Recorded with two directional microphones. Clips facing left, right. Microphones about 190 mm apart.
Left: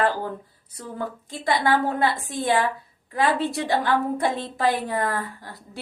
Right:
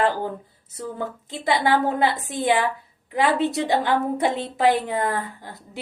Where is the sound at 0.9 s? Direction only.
20° right (ahead or behind).